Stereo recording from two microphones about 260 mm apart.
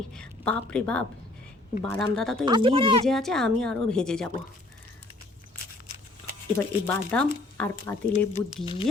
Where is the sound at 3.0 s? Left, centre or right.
Centre.